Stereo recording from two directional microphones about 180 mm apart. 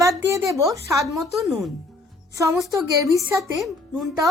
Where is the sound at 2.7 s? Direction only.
20° right (ahead or behind).